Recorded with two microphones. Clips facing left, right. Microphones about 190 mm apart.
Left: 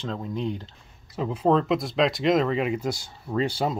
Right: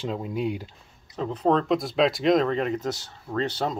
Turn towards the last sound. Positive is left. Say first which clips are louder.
# left 2 dB
turn(degrees=10)  # may be behind; listen again after turning